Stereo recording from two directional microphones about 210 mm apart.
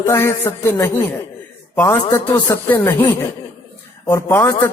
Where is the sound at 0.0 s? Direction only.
10° left (ahead or behind).